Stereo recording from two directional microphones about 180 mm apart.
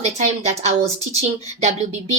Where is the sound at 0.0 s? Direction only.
35° right (ahead or behind).